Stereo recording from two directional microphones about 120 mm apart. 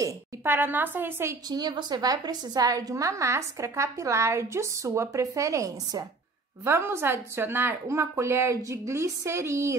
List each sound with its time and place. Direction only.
0.0 s a woman's voice: 20° right (ahead or behind)
1.5 s a woman's voice: 35° right (ahead or behind)